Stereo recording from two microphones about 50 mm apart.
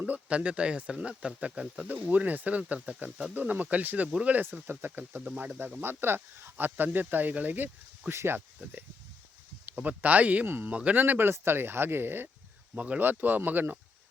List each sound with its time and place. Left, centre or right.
0.1 s speech: right
3.3 s speech: right
5.8 s speech: right
8.1 s speech: right
9.6 s speech: right
10.4 s speech: right
10.7 s speech: right
11.3 s speech: right
12.7 s speech: right
13.0 s speech: right